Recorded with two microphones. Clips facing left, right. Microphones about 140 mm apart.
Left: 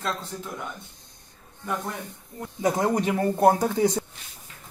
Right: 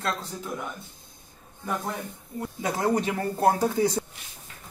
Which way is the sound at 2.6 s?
15° left (ahead or behind).